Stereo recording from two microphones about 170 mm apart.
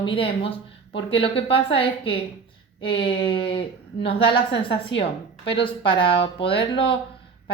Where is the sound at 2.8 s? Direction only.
30° left (ahead or behind).